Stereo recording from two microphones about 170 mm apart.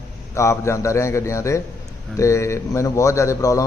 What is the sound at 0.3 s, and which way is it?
A man's voice, 15° left (ahead or behind).